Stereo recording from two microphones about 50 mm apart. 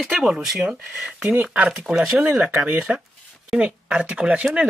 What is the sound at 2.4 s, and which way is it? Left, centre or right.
Speech, right.